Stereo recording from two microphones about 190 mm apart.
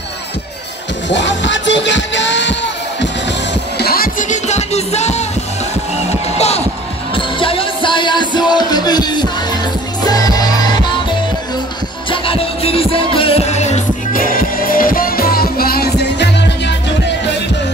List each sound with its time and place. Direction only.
1.0 s music: 70° left (ahead or behind)
3.7 s music: 55° left (ahead or behind); by 5.2 s 35° left (ahead or behind)
6.3 s music: 35° left (ahead or behind)
12.1 s music: 30° left (ahead or behind); by 16.7 s 60° left (ahead or behind)